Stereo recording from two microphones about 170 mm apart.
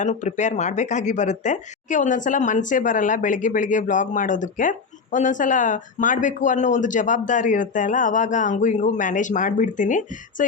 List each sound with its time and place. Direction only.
0.0 s speech: 45° left (ahead or behind)